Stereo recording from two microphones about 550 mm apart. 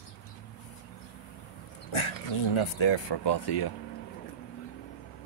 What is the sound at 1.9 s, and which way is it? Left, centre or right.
Speech, left.